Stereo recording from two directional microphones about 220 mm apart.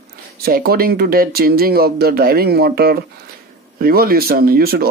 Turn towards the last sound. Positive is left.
turn(degrees=-45)  # may be behind; listen again after turning